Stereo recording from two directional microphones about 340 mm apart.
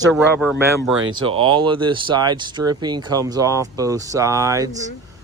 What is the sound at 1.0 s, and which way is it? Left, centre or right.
Speech, right.